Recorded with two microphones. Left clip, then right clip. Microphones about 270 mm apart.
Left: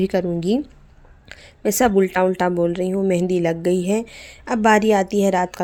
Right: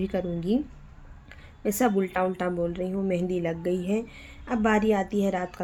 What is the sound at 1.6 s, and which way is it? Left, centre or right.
Speech, left.